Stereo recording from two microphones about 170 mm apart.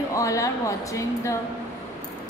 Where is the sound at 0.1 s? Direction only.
20° left (ahead or behind).